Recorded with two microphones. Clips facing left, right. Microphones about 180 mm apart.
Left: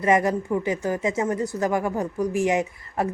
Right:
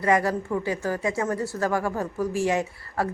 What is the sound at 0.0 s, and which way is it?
Speech, 20° left (ahead or behind).